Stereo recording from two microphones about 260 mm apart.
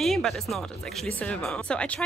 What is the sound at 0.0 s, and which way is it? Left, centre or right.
Speech, centre.